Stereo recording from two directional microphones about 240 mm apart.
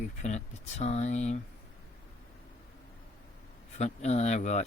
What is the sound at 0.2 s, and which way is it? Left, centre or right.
Speech, left.